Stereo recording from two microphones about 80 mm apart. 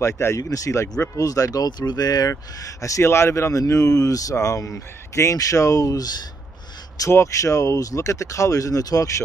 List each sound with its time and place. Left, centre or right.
0.0 s speech: left
7.1 s speech: left